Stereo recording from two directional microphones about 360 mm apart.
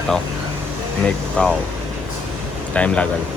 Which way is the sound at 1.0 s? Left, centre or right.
Centre.